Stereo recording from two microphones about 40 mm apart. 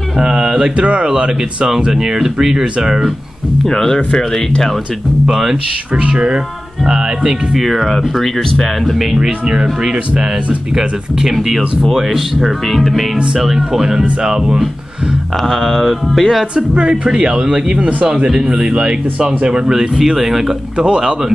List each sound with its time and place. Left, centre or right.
0.2 s speech: right
0.8 s speech: right
1.7 s speech: centre
3.6 s speech: centre
5.3 s speech: centre
6.0 s speech: right
7.5 s speech: centre
11.8 s speech: centre
13.4 s speech: centre
15.4 s speech: centre
16.5 s speech: right
19.7 s speech: centre
20.7 s speech: right